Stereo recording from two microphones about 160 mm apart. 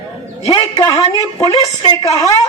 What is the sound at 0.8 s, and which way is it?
Speech, 20° left (ahead or behind).